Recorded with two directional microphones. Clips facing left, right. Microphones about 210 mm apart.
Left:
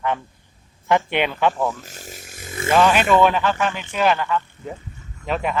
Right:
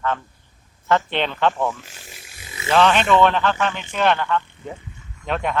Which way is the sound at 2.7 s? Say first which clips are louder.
Even; 10° left (ahead or behind).